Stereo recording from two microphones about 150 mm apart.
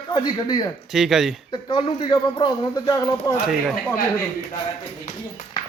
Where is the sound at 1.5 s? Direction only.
35° left (ahead or behind).